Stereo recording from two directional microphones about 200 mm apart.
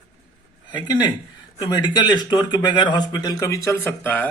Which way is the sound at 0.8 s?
20° left (ahead or behind).